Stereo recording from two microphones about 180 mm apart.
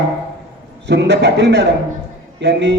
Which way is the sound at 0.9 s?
70° right (ahead or behind).